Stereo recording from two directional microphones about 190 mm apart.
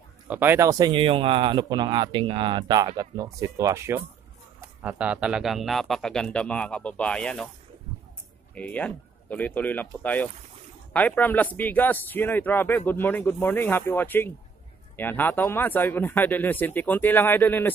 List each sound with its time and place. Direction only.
0.3 s speech: 10° right (ahead or behind); by 7.4 s 5° left (ahead or behind)
8.5 s speech: 5° left (ahead or behind)